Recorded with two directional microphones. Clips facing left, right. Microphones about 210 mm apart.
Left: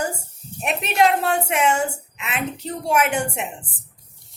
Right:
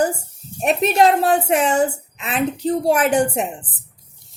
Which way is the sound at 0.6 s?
35° right (ahead or behind).